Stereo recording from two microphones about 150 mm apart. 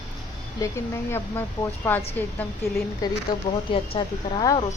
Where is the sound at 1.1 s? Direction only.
15° left (ahead or behind).